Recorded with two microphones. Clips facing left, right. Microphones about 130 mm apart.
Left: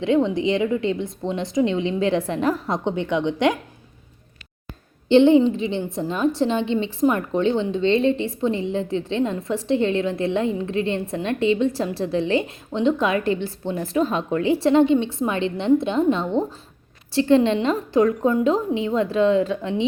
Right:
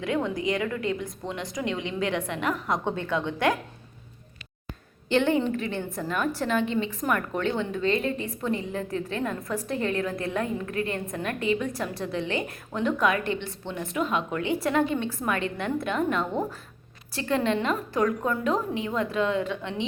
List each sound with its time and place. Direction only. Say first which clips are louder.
0.0 s a woman's voice: left 8 dB; 25° left (ahead or behind)
5.0 s a woman's voice: left 9 dB; 25° left (ahead or behind)